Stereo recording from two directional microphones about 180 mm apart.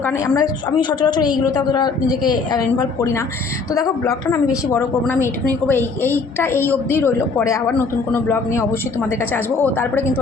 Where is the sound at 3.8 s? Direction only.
20° left (ahead or behind).